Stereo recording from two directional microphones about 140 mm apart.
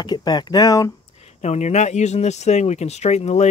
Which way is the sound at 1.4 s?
55° left (ahead or behind).